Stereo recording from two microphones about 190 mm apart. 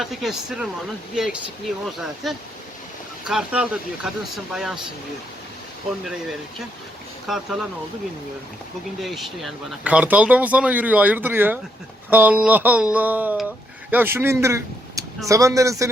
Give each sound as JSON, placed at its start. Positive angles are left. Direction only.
{"t": 0.0, "sound": "speech", "side_deg": 0}
{"t": 7.3, "sound": "speech", "side_deg": 0}
{"t": 9.0, "sound": "speech", "side_deg": 0}